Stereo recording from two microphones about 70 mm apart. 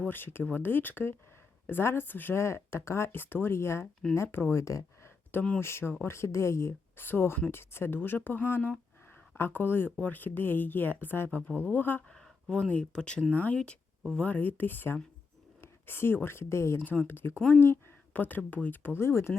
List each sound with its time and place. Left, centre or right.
0.1 s speech: left
12.5 s speech: centre
13.3 s speech: left